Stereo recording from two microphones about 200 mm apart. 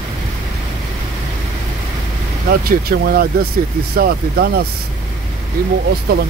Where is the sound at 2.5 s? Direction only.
50° right (ahead or behind).